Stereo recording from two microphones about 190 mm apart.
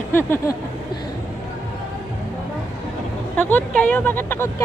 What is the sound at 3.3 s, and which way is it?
Speech, 10° left (ahead or behind).